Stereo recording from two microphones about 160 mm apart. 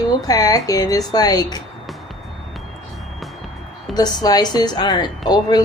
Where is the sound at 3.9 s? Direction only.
25° left (ahead or behind).